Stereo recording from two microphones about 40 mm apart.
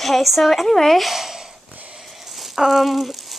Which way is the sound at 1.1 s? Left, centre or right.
Centre.